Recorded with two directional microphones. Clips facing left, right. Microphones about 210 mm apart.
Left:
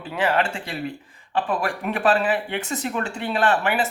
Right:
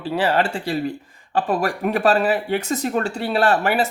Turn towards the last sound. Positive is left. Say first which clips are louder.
# right 3 dB
turn(degrees=-40)  # may be behind; listen again after turning